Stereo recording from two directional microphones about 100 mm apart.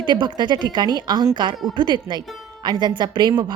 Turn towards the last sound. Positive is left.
turn(degrees=-50)  # may be behind; listen again after turning